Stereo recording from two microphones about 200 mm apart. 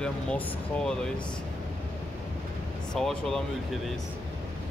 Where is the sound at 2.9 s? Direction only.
5° left (ahead or behind).